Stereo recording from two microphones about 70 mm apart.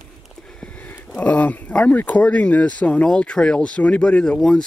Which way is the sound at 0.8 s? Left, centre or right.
Left.